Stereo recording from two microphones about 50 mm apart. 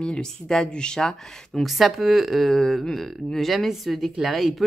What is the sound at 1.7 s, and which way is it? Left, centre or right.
Speech, centre.